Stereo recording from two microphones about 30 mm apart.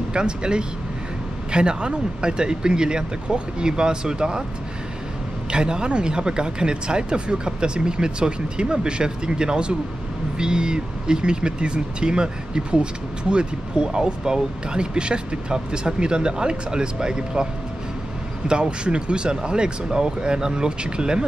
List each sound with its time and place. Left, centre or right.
0.1 s speech: right
5.5 s speech: right
13.9 s speech: right
18.5 s speech: right